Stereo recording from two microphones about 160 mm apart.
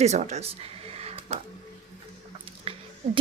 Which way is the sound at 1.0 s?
40° right (ahead or behind).